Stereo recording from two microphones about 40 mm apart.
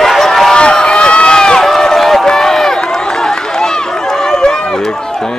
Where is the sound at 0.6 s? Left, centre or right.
Left.